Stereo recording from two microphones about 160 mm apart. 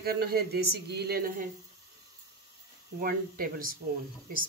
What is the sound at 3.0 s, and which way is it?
Speech, 65° right (ahead or behind).